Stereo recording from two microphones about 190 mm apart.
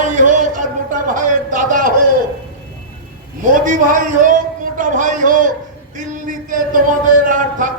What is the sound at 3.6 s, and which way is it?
Speech, 45° right (ahead or behind).